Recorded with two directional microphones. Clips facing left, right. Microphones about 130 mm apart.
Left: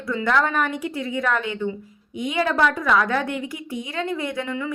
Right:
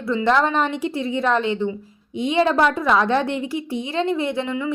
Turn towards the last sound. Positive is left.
turn(degrees=-25)  # may be behind; listen again after turning